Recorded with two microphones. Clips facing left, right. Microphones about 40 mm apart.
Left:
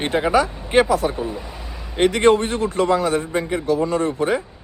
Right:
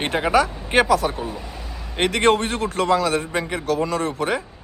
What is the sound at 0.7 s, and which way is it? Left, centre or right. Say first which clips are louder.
Speech: left 1 dB; right.